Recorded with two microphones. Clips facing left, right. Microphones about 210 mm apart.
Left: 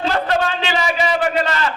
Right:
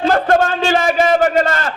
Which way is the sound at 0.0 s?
50° right (ahead or behind).